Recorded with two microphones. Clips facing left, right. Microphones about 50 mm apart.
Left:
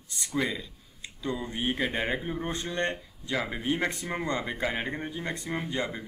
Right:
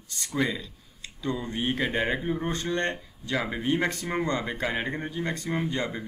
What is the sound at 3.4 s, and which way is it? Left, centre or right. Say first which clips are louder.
Speech: right 2 dB; centre.